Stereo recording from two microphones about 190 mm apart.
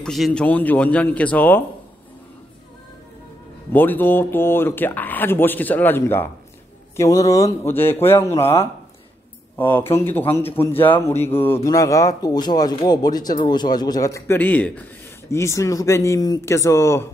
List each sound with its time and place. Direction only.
0.0 s a man's voice: centre (ahead or behind)
3.7 s a man's voice: 10° left (ahead or behind)